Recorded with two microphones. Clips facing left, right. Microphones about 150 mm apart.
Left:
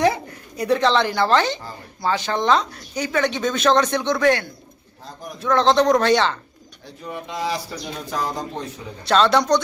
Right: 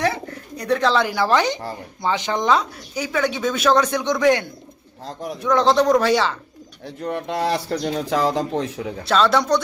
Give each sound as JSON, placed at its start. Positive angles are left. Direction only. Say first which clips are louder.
{"t": 0.0, "sound": "speech", "louder": "left 3 dB", "side_deg": 10}
{"t": 5.0, "sound": "speech", "louder": "right 6 dB", "side_deg": -80}
{"t": 5.4, "sound": "speech", "louder": "even", "side_deg": -15}
{"t": 7.0, "sound": "speech", "louder": "right 4 dB", "side_deg": -60}
{"t": 9.0, "sound": "speech", "louder": "left 1 dB", "side_deg": -5}